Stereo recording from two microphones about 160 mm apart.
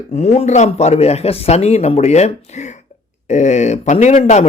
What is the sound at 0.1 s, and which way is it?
Speech, 45° left (ahead or behind).